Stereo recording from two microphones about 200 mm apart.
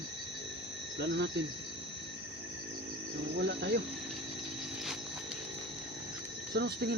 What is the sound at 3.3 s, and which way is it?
Speech, 60° right (ahead or behind).